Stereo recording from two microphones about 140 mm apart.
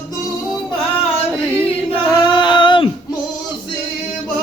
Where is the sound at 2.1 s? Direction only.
35° left (ahead or behind).